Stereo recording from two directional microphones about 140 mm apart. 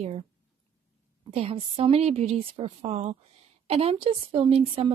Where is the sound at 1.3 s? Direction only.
45° right (ahead or behind).